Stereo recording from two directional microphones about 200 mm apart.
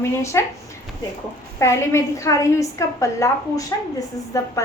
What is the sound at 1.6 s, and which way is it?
A woman's voice, 15° left (ahead or behind).